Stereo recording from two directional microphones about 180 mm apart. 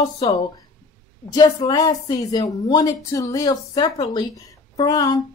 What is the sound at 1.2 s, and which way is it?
Speech, 20° left (ahead or behind).